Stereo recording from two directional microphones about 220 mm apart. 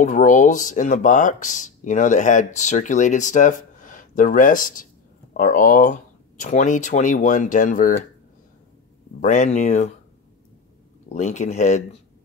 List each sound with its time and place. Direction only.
0.0 s speech: 35° left (ahead or behind)
9.2 s speech: 35° left (ahead or behind)
11.1 s speech: 30° left (ahead or behind)